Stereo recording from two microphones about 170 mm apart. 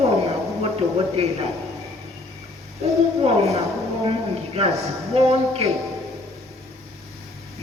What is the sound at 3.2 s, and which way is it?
Speech, 35° right (ahead or behind).